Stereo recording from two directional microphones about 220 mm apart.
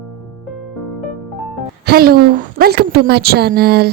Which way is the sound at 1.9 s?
45° right (ahead or behind).